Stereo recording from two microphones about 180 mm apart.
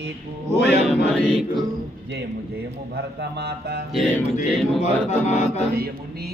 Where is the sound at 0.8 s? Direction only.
Centre (ahead or behind).